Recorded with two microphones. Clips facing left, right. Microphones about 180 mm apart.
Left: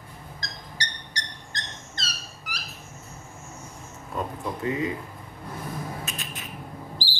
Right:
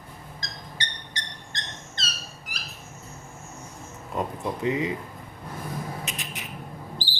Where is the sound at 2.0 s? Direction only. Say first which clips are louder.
Even; 25° right (ahead or behind).